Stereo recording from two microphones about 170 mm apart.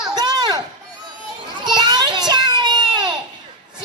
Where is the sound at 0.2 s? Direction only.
25° right (ahead or behind).